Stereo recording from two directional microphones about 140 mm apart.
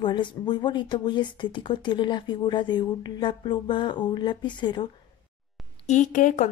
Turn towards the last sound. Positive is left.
turn(degrees=60)  # may be behind; listen again after turning